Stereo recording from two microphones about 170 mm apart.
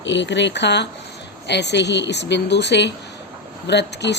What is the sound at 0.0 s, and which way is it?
Speech, 90° left.